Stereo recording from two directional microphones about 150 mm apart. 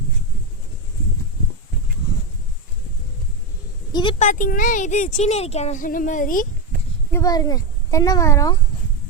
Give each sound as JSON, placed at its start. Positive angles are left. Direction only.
{"t": 4.2, "sound": "speech", "side_deg": 60}
{"t": 7.1, "sound": "speech", "side_deg": 20}